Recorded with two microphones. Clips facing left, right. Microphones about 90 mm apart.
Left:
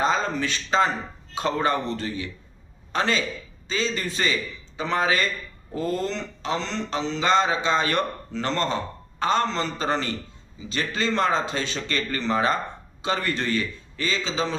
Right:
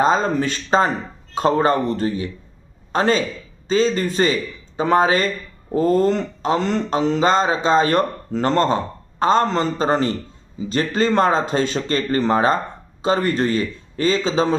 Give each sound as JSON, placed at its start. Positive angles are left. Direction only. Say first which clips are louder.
{"t": 0.0, "sound": "speech", "louder": "right 6 dB", "side_deg": -40}